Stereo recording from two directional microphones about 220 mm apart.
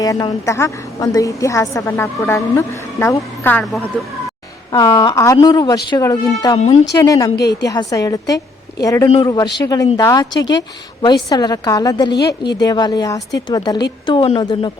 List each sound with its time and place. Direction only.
0.0 s a woman's voice: 15° left (ahead or behind)
4.7 s a woman's voice: 15° left (ahead or behind)